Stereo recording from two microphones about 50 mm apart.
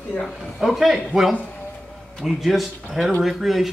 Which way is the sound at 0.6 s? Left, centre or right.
Centre.